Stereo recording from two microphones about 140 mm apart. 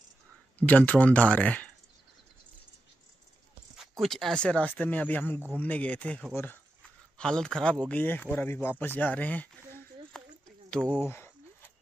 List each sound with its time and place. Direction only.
0.6 s speech: 10° left (ahead or behind)
3.7 s speech: centre (ahead or behind)
10.1 s a sound: 5° left (ahead or behind)
11.0 s speech: 15° left (ahead or behind)